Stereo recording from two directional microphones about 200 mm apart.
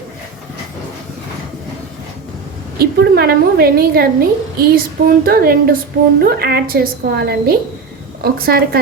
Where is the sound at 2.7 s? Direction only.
55° right (ahead or behind).